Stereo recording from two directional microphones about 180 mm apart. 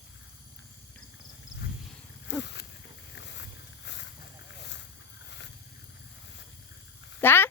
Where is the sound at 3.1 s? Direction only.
75° left (ahead or behind).